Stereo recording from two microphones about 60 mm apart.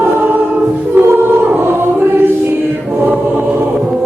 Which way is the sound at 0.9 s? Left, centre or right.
Right.